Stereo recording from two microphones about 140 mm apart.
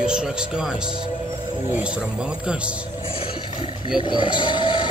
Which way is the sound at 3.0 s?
40° left (ahead or behind).